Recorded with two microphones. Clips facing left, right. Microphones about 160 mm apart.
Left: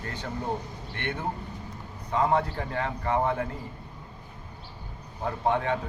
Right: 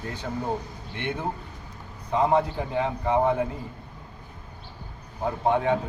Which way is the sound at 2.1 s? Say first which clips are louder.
Right 3 dB; 20° right (ahead or behind).